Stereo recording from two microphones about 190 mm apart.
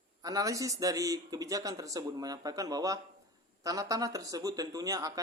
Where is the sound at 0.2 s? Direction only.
20° right (ahead or behind).